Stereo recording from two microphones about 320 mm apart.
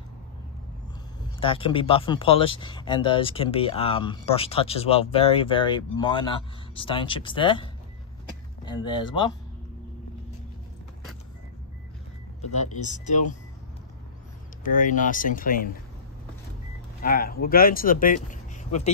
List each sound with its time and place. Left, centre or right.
1.4 s speech: centre
12.8 s speech: left
14.6 s speech: left
17.0 s speech: left